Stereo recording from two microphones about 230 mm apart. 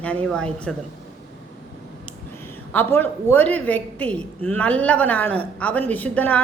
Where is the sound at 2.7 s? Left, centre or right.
Centre.